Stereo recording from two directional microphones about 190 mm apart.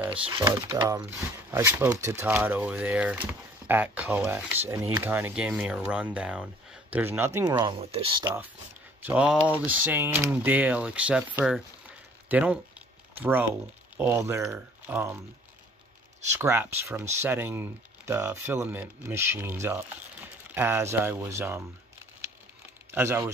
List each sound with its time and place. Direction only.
0.0 s pigeon: 5° right (ahead or behind)
0.3 s speech: 20° right (ahead or behind)
7.6 s speech: 30° right (ahead or behind)
9.0 s speech: 5° right (ahead or behind)
16.3 s speech: 10° right (ahead or behind)
22.8 s speech: 10° right (ahead or behind)